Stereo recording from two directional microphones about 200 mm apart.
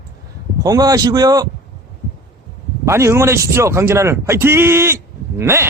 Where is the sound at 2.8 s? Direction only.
15° right (ahead or behind).